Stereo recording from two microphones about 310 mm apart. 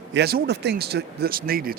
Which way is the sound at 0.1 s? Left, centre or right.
Right.